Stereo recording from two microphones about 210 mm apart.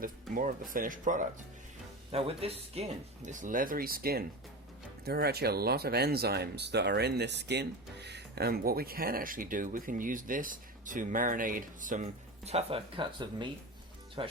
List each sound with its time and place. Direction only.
0.0 s speech: 40° right (ahead or behind)
2.1 s speech: 30° right (ahead or behind)
12.5 s speech: 25° right (ahead or behind)